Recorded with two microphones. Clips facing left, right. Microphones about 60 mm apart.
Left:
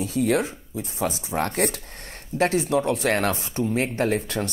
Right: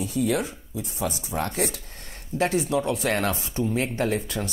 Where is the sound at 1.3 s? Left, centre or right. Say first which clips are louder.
Left 4 dB; left.